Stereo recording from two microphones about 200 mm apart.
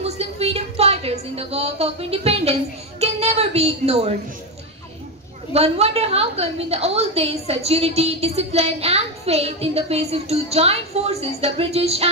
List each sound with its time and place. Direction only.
0.0 s a sound: 30° right (ahead or behind)
3.0 s a woman's voice: 30° right (ahead or behind)
5.5 s a woman's voice: 30° right (ahead or behind)